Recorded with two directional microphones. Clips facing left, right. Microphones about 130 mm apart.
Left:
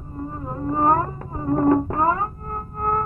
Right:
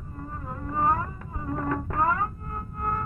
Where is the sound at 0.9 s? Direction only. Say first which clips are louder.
Left 7 dB; 45° left (ahead or behind).